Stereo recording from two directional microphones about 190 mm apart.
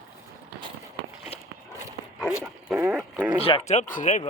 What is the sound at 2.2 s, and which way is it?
Dog, 10° right (ahead or behind).